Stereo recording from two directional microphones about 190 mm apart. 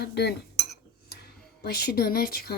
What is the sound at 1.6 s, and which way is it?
Speech, 55° left (ahead or behind).